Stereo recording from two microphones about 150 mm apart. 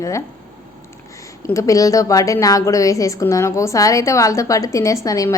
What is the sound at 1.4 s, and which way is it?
A woman's voice, 20° left (ahead or behind).